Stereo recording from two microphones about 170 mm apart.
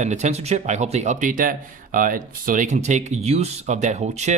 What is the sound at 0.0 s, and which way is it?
Speech, 45° right (ahead or behind).